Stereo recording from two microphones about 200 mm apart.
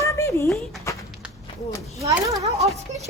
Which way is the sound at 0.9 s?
15° left (ahead or behind).